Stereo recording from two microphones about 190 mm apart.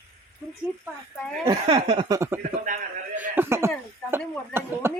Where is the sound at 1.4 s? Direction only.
30° right (ahead or behind).